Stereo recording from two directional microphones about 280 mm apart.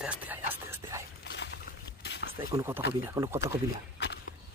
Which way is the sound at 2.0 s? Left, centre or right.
Left.